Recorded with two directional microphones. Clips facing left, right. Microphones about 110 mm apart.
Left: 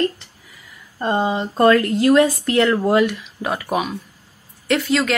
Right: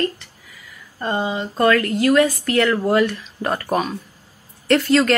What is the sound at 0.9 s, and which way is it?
Speech, 20° left (ahead or behind).